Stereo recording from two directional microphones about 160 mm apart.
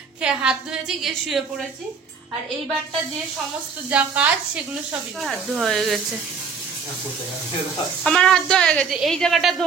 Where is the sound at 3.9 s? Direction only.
10° right (ahead or behind).